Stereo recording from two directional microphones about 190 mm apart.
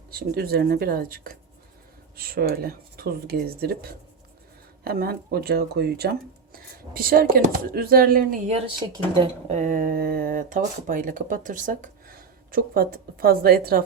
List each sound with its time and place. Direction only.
0.1 s speech: 55° right (ahead or behind)
8.4 s speech: 35° right (ahead or behind); by 13.8 s 50° right (ahead or behind)